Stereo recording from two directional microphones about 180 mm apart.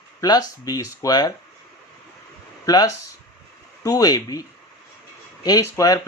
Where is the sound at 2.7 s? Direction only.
20° left (ahead or behind).